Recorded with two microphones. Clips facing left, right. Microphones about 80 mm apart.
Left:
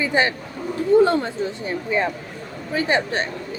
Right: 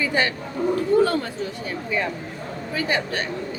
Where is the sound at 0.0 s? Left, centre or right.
Left.